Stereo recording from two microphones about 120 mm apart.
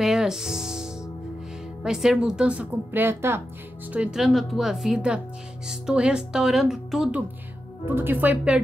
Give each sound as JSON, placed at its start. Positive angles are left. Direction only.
{"t": 0.0, "sound": "music", "side_deg": -5}
{"t": 1.8, "sound": "speech", "side_deg": -5}
{"t": 3.9, "sound": "speech", "side_deg": -10}
{"t": 7.8, "sound": "speech", "side_deg": -20}